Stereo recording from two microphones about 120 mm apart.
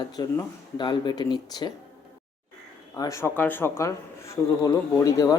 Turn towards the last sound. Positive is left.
turn(degrees=30)  # may be behind; listen again after turning